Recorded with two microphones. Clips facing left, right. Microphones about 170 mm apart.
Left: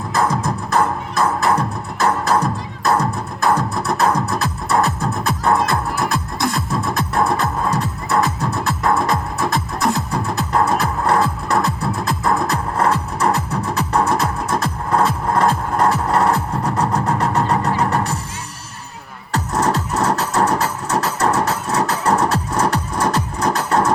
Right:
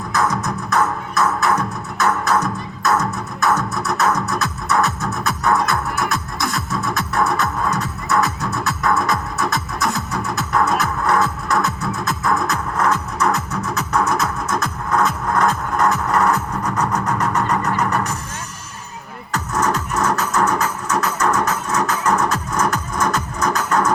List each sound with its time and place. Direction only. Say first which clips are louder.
0.1 s music: left 2 dB; 30° left (ahead or behind)
19.3 s music: left 2 dB; 35° left (ahead or behind)